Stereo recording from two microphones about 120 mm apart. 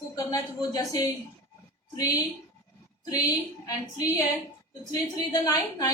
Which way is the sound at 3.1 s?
30° left (ahead or behind).